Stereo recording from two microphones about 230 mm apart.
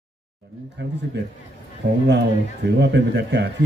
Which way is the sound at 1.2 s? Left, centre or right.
Right.